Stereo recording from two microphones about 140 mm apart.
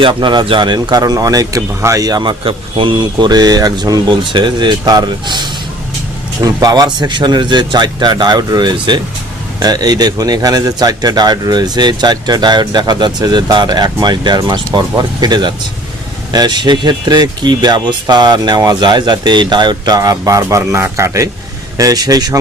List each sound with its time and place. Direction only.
0.0 s a man's voice: 35° right (ahead or behind)